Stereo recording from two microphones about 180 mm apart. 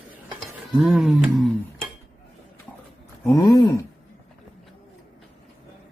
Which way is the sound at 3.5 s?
20° left (ahead or behind).